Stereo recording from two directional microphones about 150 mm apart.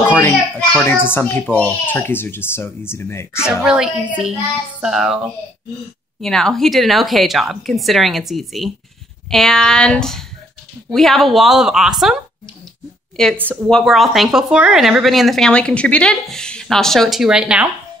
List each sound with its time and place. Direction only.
0.1 s speech: 10° left (ahead or behind)
3.6 s a woman's voice: 5° right (ahead or behind)